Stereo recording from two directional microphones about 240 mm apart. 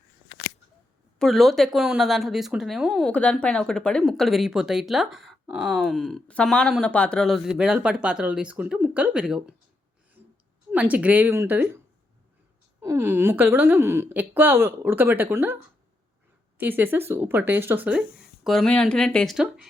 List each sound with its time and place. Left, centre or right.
1.2 s speech: centre
10.7 s a woman's voice: centre
12.8 s a woman's voice: centre
16.6 s speech: centre